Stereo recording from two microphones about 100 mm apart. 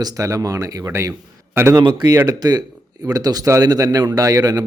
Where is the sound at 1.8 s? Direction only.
40° right (ahead or behind).